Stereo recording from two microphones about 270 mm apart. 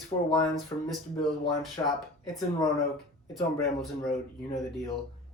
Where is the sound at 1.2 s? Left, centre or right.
Centre.